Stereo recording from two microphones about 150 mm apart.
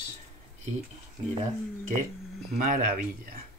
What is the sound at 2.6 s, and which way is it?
Speech, 70° right (ahead or behind).